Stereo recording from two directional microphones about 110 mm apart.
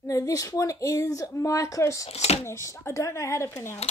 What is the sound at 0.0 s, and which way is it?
Speech, 30° left (ahead or behind).